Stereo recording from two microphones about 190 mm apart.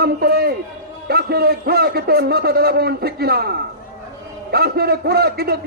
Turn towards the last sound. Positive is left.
turn(degrees=-55)  # may be behind; listen again after turning